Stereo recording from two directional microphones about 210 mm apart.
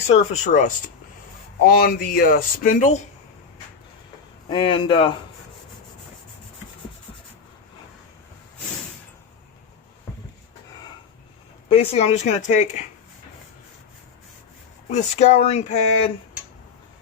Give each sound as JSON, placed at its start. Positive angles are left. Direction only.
{"t": 0.1, "sound": "speech", "side_deg": 35}
{"t": 4.4, "sound": "speech", "side_deg": 25}
{"t": 11.7, "sound": "speech", "side_deg": 30}
{"t": 14.8, "sound": "speech", "side_deg": 30}